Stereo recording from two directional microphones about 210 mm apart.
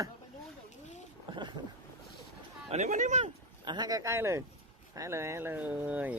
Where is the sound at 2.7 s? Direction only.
35° right (ahead or behind).